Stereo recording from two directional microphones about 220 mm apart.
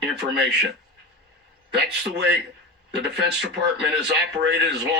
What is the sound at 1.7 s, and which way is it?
A man's voice, 50° right (ahead or behind).